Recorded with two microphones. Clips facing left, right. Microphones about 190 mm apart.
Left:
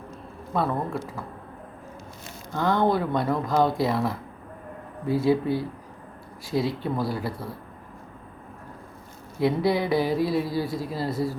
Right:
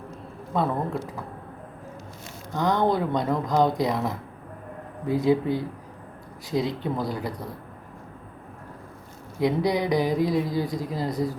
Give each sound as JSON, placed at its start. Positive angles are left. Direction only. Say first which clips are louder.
{"t": 0.5, "sound": "speech", "louder": "right 1 dB", "side_deg": -20}
{"t": 2.5, "sound": "speech", "louder": "even", "side_deg": -15}
{"t": 9.4, "sound": "speech", "louder": "even", "side_deg": -15}